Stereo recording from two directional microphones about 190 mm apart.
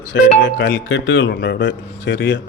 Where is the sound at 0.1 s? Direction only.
70° left (ahead or behind).